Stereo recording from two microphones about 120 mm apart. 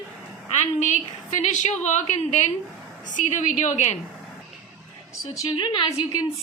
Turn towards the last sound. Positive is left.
turn(degrees=40)  # may be behind; listen again after turning